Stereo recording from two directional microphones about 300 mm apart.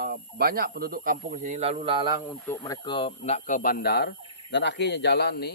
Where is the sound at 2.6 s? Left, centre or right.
Centre; by 5.5 s left.